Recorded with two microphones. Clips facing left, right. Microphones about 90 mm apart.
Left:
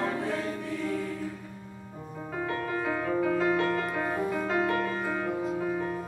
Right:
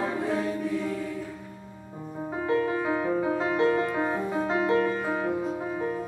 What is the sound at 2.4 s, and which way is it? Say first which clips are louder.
Music: right 5 dB; 20° right (ahead or behind).